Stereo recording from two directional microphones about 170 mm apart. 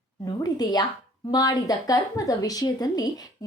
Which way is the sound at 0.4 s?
25° left (ahead or behind).